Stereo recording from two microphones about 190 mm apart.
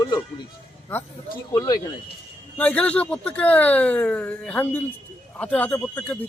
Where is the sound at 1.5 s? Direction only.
20° left (ahead or behind).